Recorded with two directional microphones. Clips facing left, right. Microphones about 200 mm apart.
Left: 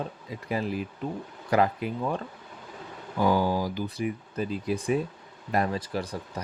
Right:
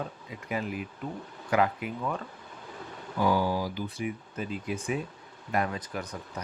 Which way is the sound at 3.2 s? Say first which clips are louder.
Left 2 dB; 45° left (ahead or behind).